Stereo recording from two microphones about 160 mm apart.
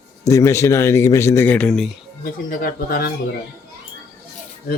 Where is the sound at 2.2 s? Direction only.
60° left (ahead or behind).